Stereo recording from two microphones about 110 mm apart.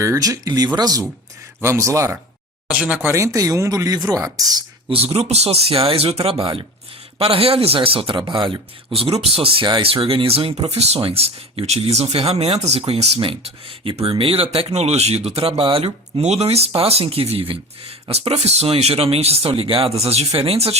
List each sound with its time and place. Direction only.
0.0 s speech: 30° right (ahead or behind)
1.6 s speech: 25° right (ahead or behind)
2.6 s speech: 10° right (ahead or behind)
3.0 s speech: 25° right (ahead or behind)
4.9 s speech: 60° right (ahead or behind); by 8.6 s 45° right (ahead or behind)
8.9 s speech: 60° right (ahead or behind)
13.1 s speech: 55° right (ahead or behind)
18.3 s speech: 70° right (ahead or behind)